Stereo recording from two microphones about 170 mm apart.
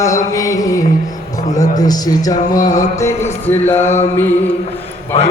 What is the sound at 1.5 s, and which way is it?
Speech, 20° left (ahead or behind).